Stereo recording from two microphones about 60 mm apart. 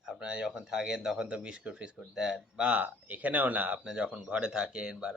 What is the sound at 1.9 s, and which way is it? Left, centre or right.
Speech, centre.